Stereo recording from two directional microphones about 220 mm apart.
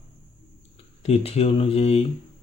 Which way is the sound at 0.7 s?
30° left (ahead or behind).